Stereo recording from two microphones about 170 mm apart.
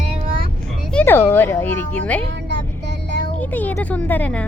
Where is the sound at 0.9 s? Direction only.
10° left (ahead or behind).